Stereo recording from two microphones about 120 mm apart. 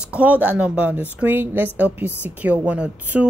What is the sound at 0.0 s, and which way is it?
Speech, 10° right (ahead or behind).